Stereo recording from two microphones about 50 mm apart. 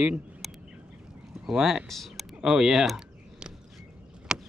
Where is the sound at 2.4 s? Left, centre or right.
Centre.